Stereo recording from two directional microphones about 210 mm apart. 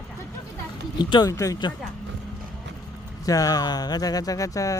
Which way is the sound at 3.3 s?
15° left (ahead or behind).